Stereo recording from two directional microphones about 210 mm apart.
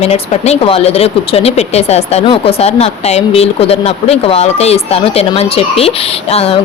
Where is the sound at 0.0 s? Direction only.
30° left (ahead or behind).